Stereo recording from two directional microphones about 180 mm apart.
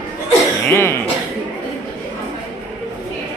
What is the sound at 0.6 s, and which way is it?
Cough, 15° left (ahead or behind).